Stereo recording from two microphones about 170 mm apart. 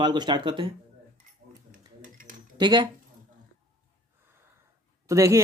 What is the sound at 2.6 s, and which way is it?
Speech, 25° right (ahead or behind).